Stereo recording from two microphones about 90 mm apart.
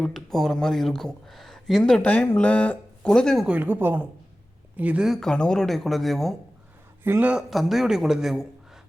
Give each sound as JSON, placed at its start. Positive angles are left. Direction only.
{"t": 0.0, "sound": "speech", "side_deg": 5}
{"t": 3.4, "sound": "speech", "side_deg": -15}
{"t": 5.0, "sound": "a man's voice", "side_deg": 0}
{"t": 7.0, "sound": "speech", "side_deg": -20}
{"t": 7.3, "sound": "a man's voice", "side_deg": 0}